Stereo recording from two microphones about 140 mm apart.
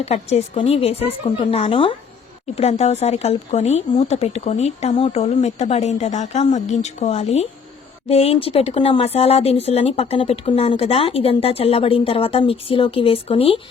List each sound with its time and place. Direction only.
0.0 s speech: 50° left (ahead or behind)
2.6 s speech: 50° left (ahead or behind)